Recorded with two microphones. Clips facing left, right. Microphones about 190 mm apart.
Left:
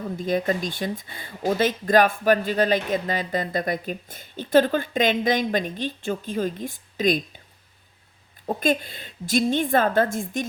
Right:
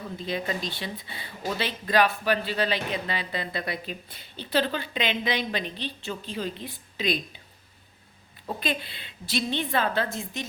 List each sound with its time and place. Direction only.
0.2 s speech: 45° left (ahead or behind)
8.4 s speech: 45° left (ahead or behind)